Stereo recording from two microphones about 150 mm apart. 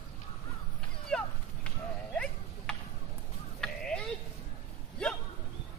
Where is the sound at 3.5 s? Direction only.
5° left (ahead or behind).